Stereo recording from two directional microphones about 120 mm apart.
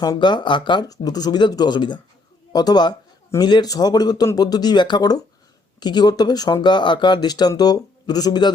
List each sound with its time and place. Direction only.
0.0 s speech: 35° left (ahead or behind)